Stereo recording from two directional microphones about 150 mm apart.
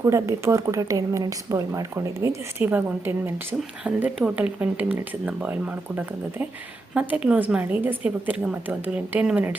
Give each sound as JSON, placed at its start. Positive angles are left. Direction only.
{"t": 0.0, "sound": "speech", "side_deg": -20}